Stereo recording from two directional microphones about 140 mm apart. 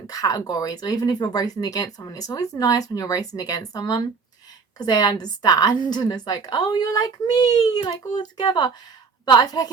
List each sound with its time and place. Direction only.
0.1 s speech: 25° left (ahead or behind)